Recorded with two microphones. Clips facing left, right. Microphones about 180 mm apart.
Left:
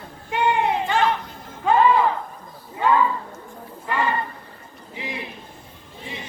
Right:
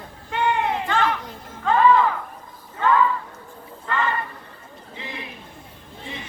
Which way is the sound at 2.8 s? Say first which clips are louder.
Even; 15° left (ahead or behind).